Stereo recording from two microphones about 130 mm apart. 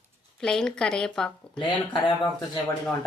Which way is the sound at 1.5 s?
35° left (ahead or behind).